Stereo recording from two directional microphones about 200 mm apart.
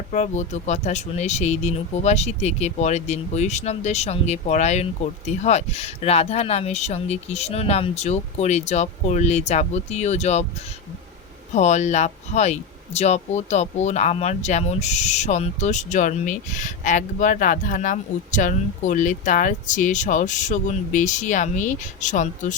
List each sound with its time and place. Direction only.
0.1 s speech: 35° left (ahead or behind)
11.5 s speech: 35° left (ahead or behind)